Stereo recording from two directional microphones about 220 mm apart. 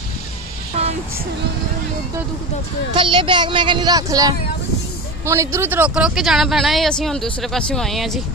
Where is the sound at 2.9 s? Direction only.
25° right (ahead or behind); by 8.2 s centre (ahead or behind).